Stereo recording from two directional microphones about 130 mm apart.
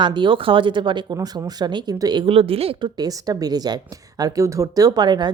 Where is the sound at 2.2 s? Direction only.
50° right (ahead or behind).